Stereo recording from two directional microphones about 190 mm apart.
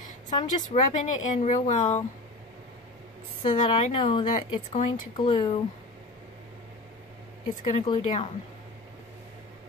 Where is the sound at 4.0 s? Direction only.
25° left (ahead or behind).